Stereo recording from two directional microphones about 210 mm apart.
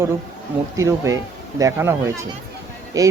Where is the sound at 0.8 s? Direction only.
15° right (ahead or behind).